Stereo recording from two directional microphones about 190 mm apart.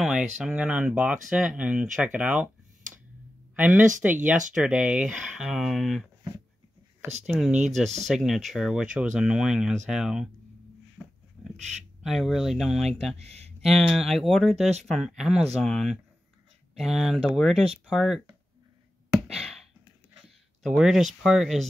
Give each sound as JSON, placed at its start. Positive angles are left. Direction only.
{"t": 0.0, "sound": "speech", "side_deg": -5}
{"t": 3.5, "sound": "speech", "side_deg": -10}
{"t": 7.2, "sound": "speech", "side_deg": 0}
{"t": 11.4, "sound": "bird", "side_deg": -5}
{"t": 12.0, "sound": "speech", "side_deg": 0}
{"t": 13.2, "sound": "a sound", "side_deg": -35}
{"t": 13.8, "sound": "speech", "side_deg": 0}
{"t": 19.2, "sound": "a sound", "side_deg": 0}
{"t": 20.6, "sound": "speech", "side_deg": -5}